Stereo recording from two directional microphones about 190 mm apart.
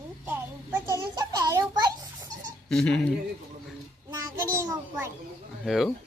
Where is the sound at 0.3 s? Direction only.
15° right (ahead or behind).